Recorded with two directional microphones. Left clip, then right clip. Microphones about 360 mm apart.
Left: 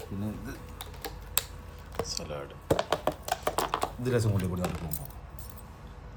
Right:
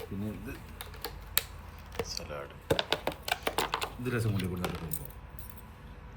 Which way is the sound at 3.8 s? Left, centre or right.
Left.